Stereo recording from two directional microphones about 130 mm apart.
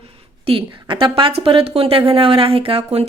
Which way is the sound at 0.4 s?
40° right (ahead or behind).